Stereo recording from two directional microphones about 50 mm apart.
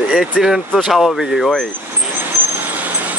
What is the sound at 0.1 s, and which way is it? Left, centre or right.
Speech, centre.